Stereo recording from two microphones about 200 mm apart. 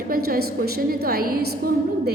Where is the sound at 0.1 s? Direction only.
50° right (ahead or behind).